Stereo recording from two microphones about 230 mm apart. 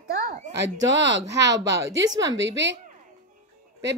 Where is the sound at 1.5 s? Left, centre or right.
Centre.